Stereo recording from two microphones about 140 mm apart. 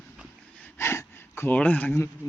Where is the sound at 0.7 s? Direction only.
20° left (ahead or behind).